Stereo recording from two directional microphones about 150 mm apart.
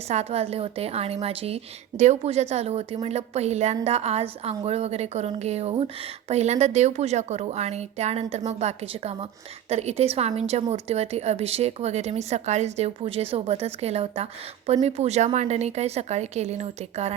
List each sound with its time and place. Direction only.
0.1 s a woman's voice: 45° right (ahead or behind)